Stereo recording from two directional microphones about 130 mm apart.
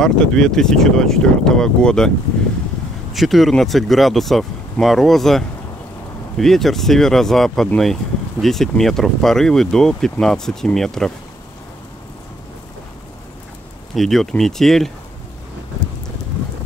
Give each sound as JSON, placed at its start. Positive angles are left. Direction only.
{"t": 0.0, "sound": "speech", "side_deg": 5}
{"t": 13.9, "sound": "speech", "side_deg": 0}